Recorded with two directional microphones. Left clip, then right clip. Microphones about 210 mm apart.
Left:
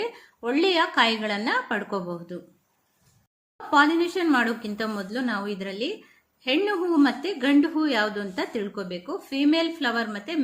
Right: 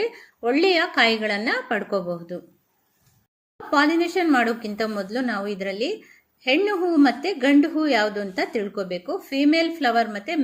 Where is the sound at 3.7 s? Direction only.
5° right (ahead or behind).